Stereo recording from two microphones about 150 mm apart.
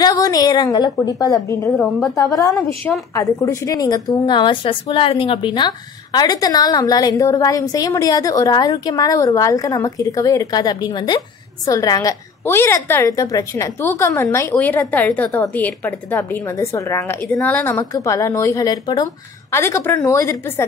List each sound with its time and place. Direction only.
0.0 s a woman's voice: 25° left (ahead or behind)
1.7 s a woman's voice: centre (ahead or behind)
3.2 s a woman's voice: 20° left (ahead or behind)